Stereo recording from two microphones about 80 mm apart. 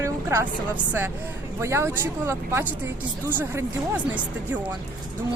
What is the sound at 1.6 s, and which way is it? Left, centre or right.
Speech, right.